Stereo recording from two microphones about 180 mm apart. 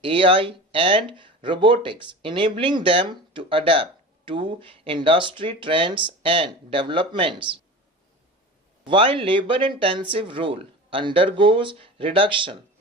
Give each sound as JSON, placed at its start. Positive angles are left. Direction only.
{"t": 0.0, "sound": "speech", "side_deg": -30}
{"t": 8.9, "sound": "speech", "side_deg": -30}